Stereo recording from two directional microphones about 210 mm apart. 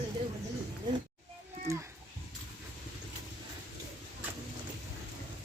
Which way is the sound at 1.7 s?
15° right (ahead or behind).